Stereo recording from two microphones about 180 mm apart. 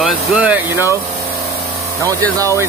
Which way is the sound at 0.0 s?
5° right (ahead or behind).